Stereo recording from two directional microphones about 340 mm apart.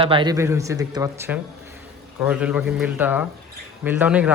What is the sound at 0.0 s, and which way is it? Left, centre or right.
Speech, centre.